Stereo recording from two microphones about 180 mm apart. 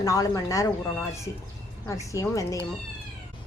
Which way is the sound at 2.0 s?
15° left (ahead or behind).